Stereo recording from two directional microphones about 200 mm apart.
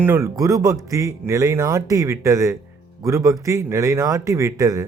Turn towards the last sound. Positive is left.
turn(degrees=-15)  # may be behind; listen again after turning